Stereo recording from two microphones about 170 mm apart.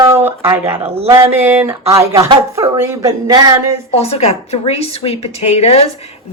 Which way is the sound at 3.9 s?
35° left (ahead or behind).